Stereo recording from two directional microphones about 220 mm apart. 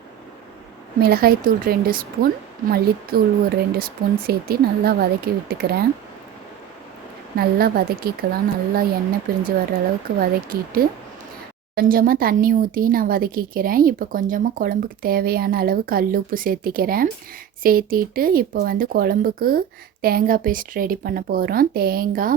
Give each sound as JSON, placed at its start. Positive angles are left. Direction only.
{"t": 1.0, "sound": "a woman's voice", "side_deg": -45}
{"t": 7.3, "sound": "a woman's voice", "side_deg": -45}